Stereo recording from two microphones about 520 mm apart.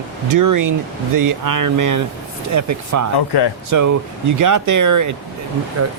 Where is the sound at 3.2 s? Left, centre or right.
Left.